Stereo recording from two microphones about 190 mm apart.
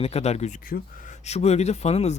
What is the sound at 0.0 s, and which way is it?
Speech, 35° left (ahead or behind).